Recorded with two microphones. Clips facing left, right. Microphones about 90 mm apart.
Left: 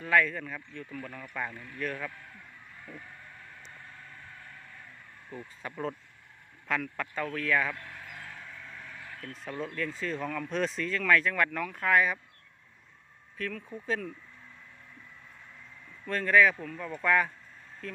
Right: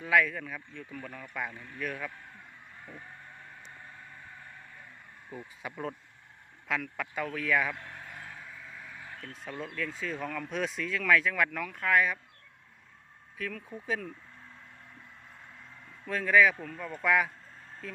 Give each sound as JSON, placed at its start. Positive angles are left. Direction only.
{"t": 0.0, "sound": "speech", "side_deg": -5}
{"t": 2.8, "sound": "a sound", "side_deg": -25}
{"t": 4.1, "sound": "vehicle", "side_deg": -20}
{"t": 5.3, "sound": "speech", "side_deg": -10}
{"t": 7.8, "sound": "vehicle", "side_deg": -25}
{"t": 8.4, "sound": "vehicle", "side_deg": -10}
{"t": 9.4, "sound": "speech", "side_deg": 0}
{"t": 13.3, "sound": "speech", "side_deg": -5}
{"t": 16.0, "sound": "speech", "side_deg": -5}